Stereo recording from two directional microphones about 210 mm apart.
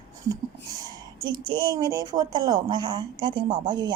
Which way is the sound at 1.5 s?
20° right (ahead or behind).